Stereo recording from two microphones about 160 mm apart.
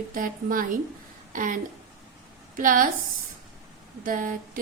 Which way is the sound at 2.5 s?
60° right (ahead or behind).